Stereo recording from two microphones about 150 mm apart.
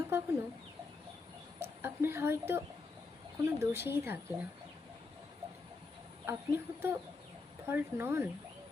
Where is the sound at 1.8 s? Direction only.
15° right (ahead or behind).